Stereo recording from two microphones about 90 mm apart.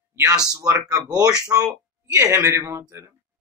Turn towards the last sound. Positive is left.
turn(degrees=-30)  # may be behind; listen again after turning